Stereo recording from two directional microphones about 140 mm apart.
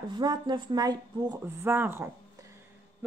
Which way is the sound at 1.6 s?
15° right (ahead or behind).